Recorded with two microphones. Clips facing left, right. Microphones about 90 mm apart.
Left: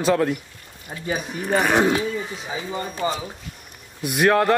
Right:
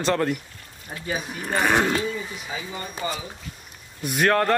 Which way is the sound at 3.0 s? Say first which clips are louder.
Left 5 dB; 25° left (ahead or behind).